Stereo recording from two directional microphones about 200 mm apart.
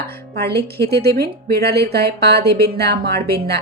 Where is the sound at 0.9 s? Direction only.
50° right (ahead or behind).